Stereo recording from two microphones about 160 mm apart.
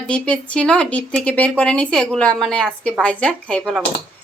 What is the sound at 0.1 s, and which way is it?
Speech, 5° left (ahead or behind).